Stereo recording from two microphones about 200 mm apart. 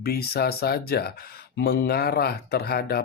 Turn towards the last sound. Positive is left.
turn(degrees=50)  # may be behind; listen again after turning